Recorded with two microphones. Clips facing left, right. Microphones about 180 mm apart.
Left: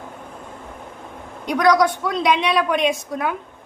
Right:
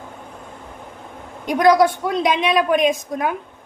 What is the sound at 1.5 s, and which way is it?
Speech, 25° right (ahead or behind).